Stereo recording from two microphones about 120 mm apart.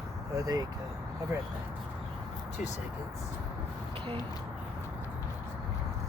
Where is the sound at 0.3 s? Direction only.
30° right (ahead or behind).